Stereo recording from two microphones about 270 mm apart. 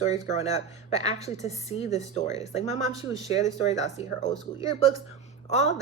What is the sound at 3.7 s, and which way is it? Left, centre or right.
Speech, left.